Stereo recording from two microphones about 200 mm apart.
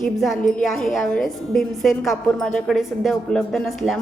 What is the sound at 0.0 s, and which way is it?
A woman's voice, centre (ahead or behind).